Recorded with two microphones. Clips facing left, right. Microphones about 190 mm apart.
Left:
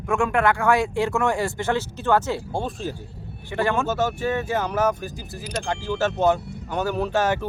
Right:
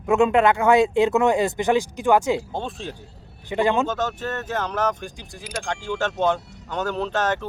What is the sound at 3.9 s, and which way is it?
Speech, 10° left (ahead or behind).